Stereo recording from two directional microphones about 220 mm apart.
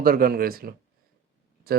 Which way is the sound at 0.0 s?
40° right (ahead or behind).